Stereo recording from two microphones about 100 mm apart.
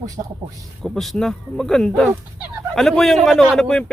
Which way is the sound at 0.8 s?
Centre (ahead or behind).